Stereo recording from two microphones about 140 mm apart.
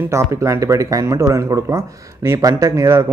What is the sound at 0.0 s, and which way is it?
Speech, 20° right (ahead or behind).